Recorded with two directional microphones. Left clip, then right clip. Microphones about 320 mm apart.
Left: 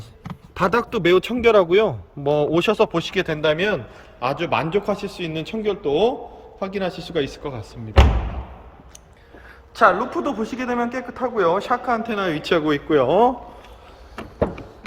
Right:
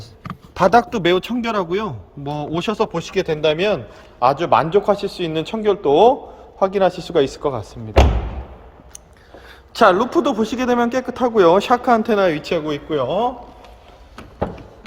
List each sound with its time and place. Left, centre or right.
0.5 s speech: centre
9.7 s speech: right
12.3 s a man's voice: centre
14.2 s a sound: centre